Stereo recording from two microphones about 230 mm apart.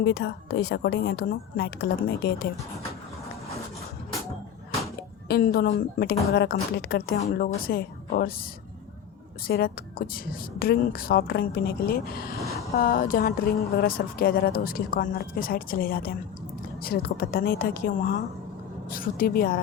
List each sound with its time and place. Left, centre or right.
0.0 s a woman's voice: left
5.3 s a woman's voice: left
9.5 s speech: left